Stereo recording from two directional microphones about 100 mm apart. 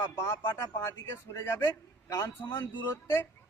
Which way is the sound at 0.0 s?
25° left (ahead or behind).